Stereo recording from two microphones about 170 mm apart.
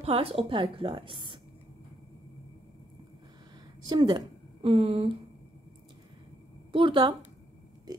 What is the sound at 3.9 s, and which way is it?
A woman's voice, 25° right (ahead or behind).